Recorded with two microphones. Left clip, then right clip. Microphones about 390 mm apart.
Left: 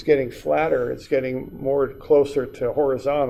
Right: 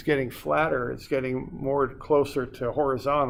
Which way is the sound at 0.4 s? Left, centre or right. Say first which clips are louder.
Left 3 dB; right.